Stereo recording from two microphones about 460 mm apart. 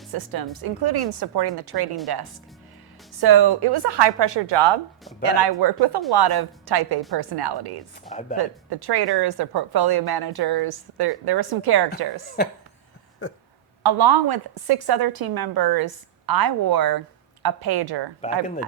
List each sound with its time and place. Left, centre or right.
0.1 s speech: right
3.2 s speech: right
13.8 s speech: right
18.2 s speech: centre